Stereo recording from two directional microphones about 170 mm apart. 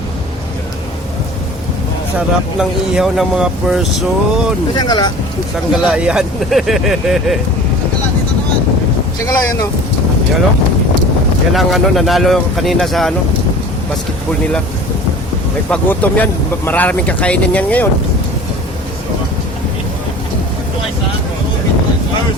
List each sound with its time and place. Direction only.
2.1 s speech: 5° right (ahead or behind)
4.7 s speech: 25° left (ahead or behind)
5.7 s speech: 5° right (ahead or behind)
9.2 s speech: 20° left (ahead or behind)
11.5 s speech: centre (ahead or behind)
15.7 s speech: 10° left (ahead or behind)